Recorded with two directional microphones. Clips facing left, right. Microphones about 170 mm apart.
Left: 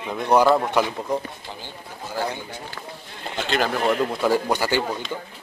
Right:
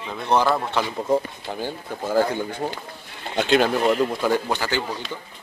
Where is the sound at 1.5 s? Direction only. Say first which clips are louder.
Right 8 dB; 50° right (ahead or behind).